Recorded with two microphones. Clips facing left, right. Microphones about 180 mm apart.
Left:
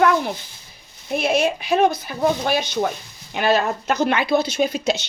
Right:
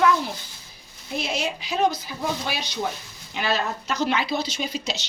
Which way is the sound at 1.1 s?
55° left (ahead or behind).